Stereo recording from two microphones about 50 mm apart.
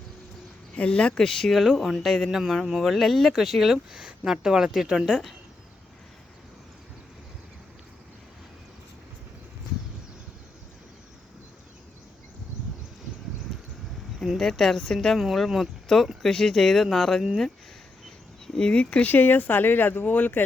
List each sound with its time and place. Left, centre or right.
0.8 s speech: centre
1.2 s speech: centre
1.6 s speech: centre
3.9 s a woman's voice: centre
14.3 s speech: centre
18.5 s speech: centre
19.1 s speech: left